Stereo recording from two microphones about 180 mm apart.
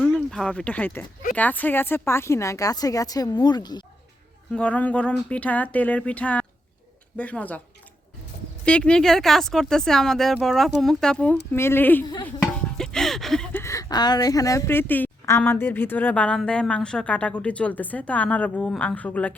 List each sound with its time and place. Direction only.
0.0 s speech: centre (ahead or behind); by 3.8 s 25° left (ahead or behind)
4.5 s speech: 5° left (ahead or behind)
8.6 s speech: 5° left (ahead or behind)
12.0 s speech: 25° left (ahead or behind)
12.4 s speech: 5° left (ahead or behind)